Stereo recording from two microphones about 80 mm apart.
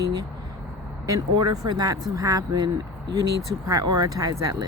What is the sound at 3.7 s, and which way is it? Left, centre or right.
Speech, right.